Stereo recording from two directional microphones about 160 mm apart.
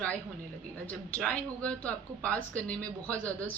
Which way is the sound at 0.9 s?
10° left (ahead or behind).